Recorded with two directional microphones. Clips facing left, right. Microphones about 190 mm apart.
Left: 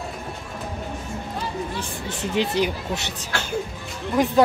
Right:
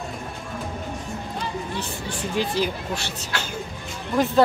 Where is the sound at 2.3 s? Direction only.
20° left (ahead or behind).